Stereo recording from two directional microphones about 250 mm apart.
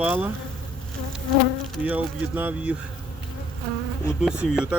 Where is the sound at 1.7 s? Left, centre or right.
Centre.